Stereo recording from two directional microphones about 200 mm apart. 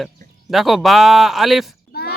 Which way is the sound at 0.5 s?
Centre (ahead or behind).